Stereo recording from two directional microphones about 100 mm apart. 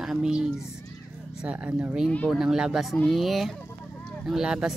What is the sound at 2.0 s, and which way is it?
Speech, 10° left (ahead or behind).